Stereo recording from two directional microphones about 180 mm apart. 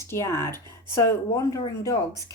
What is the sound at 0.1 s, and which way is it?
Speech, 15° left (ahead or behind).